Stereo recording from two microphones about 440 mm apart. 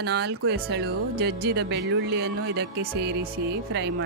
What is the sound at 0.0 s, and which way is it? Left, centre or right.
Speech, right.